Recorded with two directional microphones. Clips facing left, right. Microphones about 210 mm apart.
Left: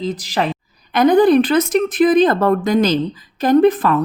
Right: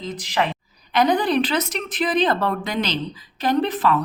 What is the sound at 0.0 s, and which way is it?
Speech, 35° left (ahead or behind).